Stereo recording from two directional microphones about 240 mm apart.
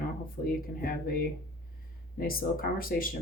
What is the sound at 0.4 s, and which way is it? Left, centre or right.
Speech, left.